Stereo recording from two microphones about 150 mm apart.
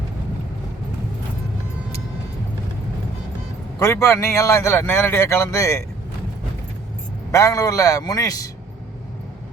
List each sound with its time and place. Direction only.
3.8 s a man's voice: 20° left (ahead or behind)
7.3 s a man's voice: 20° left (ahead or behind)